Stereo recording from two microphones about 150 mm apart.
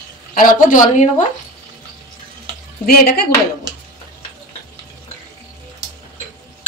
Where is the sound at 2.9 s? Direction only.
80° left.